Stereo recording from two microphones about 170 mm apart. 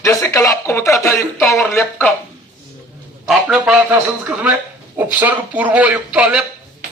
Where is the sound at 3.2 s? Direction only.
5° right (ahead or behind).